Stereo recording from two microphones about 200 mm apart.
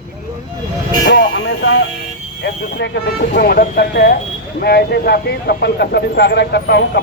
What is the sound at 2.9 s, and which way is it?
Speech, 60° left (ahead or behind).